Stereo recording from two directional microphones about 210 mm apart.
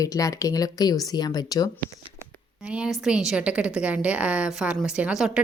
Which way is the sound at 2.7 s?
5° right (ahead or behind).